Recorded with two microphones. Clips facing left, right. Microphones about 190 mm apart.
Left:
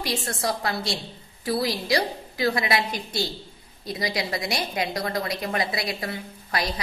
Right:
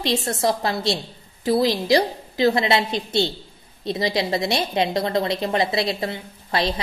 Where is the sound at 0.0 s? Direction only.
25° right (ahead or behind).